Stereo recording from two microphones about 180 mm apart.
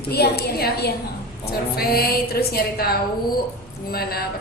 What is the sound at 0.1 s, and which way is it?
A woman's voice, 60° left (ahead or behind).